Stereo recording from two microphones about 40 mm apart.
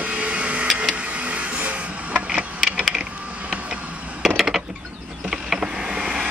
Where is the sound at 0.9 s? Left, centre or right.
Right.